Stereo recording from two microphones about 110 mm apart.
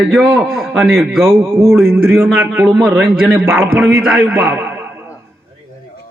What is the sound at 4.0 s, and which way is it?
Speech, 5° right (ahead or behind).